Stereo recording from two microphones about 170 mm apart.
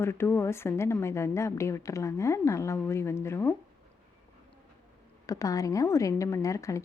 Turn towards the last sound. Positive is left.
turn(degrees=15)  # may be behind; listen again after turning